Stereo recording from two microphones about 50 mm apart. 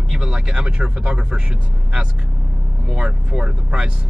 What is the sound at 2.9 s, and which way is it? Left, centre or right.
Speech, centre.